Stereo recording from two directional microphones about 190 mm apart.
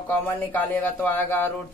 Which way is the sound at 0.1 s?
10° left (ahead or behind).